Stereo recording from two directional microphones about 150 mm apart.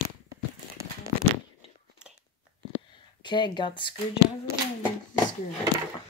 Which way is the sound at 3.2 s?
30° left (ahead or behind).